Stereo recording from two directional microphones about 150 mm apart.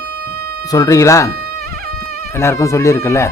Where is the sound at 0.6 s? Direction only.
25° left (ahead or behind).